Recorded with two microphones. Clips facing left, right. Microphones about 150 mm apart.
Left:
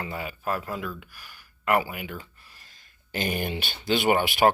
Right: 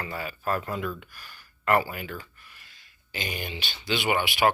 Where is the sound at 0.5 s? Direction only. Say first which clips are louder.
Right 3 dB; centre (ahead or behind).